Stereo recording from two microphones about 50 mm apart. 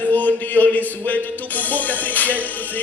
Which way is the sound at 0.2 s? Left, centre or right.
Left.